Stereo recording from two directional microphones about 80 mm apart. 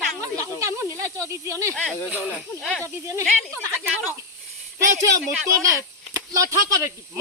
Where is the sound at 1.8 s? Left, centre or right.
Centre.